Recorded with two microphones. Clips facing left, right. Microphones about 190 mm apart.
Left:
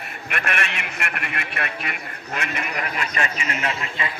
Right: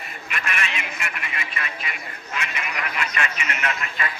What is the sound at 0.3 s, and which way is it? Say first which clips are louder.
A man's voice: left 3 dB; 55° left (ahead or behind).